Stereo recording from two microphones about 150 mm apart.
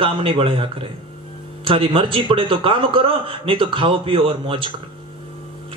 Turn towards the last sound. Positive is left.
turn(degrees=-35)  # may be behind; listen again after turning